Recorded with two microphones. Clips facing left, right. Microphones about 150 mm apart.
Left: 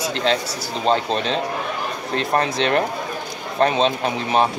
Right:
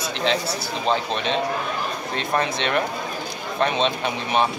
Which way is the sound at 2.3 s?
40° left (ahead or behind).